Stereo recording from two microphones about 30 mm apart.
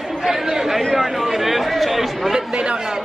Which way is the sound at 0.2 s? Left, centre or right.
Centre.